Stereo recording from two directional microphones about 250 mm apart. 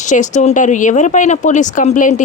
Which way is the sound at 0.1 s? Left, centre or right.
Left.